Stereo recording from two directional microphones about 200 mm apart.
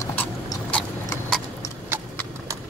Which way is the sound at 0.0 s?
15° left (ahead or behind).